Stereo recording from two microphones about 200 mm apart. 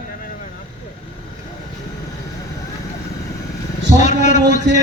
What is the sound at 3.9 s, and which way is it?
Speech, 35° left (ahead or behind).